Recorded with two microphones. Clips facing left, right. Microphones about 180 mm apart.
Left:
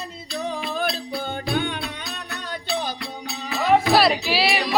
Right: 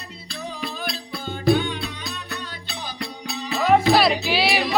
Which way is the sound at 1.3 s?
55° left (ahead or behind).